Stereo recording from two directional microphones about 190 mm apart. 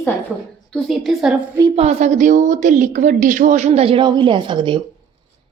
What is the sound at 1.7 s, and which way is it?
A woman's voice, 35° right (ahead or behind).